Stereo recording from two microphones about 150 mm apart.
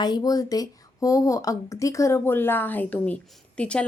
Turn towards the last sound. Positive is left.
turn(degrees=5)  # may be behind; listen again after turning